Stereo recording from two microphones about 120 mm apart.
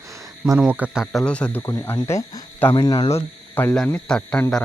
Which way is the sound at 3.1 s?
20° left (ahead or behind).